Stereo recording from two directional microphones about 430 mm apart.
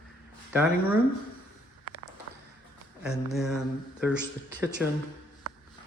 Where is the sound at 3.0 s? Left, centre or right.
Centre.